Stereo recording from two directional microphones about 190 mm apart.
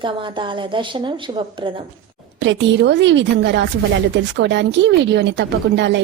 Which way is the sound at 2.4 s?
70° right (ahead or behind).